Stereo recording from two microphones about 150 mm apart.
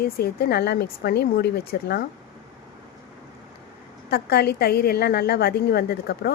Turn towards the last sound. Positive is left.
turn(degrees=90)